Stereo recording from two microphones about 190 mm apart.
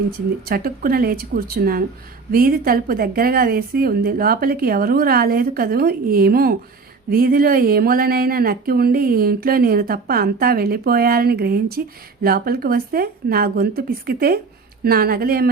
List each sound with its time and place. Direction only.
0.4 s speech: 50° right (ahead or behind)